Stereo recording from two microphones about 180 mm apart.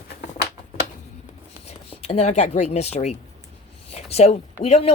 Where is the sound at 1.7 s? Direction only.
35° left (ahead or behind).